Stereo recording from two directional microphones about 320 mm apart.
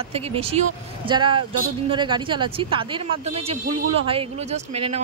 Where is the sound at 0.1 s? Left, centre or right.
Centre.